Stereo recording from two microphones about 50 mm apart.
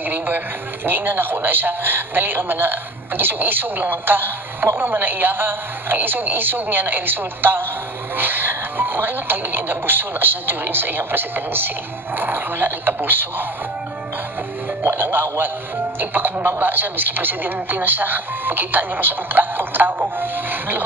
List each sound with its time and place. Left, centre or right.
0.1 s a man's voice: right
14.8 s speech: right